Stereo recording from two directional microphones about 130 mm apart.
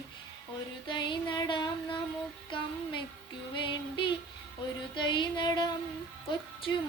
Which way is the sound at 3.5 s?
40° left (ahead or behind).